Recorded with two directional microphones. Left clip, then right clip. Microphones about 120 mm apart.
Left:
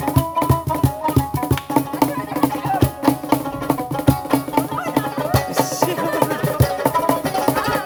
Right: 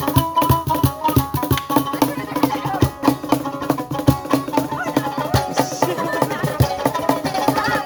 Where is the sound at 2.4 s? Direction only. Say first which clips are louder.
Even; 25° right (ahead or behind).